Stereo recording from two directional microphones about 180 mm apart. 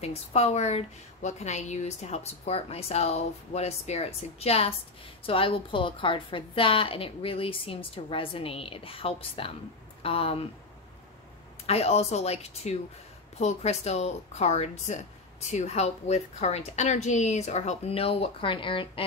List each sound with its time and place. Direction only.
0.0 s speech: 35° left (ahead or behind)
11.6 s speech: 35° left (ahead or behind)